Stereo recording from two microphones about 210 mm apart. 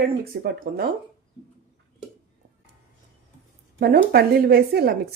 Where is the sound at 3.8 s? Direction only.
45° right (ahead or behind).